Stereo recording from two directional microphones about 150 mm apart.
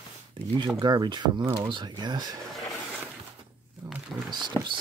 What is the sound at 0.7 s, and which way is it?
Speech, 30° right (ahead or behind).